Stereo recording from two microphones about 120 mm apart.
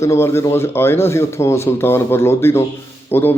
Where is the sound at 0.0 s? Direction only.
20° left (ahead or behind).